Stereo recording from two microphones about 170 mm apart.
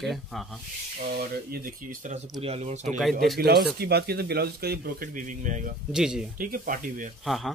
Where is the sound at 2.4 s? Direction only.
40° right (ahead or behind).